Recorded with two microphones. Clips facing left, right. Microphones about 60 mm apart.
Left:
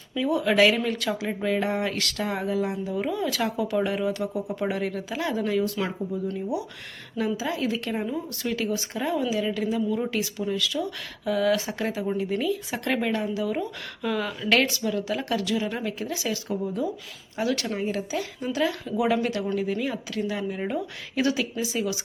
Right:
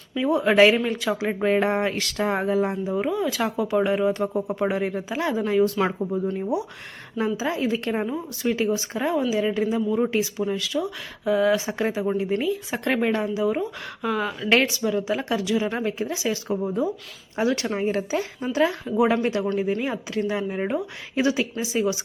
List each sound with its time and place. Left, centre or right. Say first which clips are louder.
0.1 s speech: right 3 dB; right
1.9 s speech: right 4 dB; right
2.8 s speech: right 3 dB; right
4.7 s speech: right 3 dB; right
7.3 s speech: right 3 dB; right